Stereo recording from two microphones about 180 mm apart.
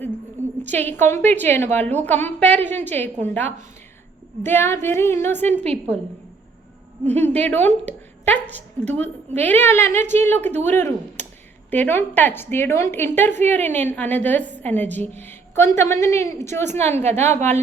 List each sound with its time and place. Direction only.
0.7 s a woman's voice: 10° left (ahead or behind)
5.6 s a woman's voice: 35° right (ahead or behind)
7.0 s a woman's voice: 10° left (ahead or behind)
16.6 s a woman's voice: 35° right (ahead or behind)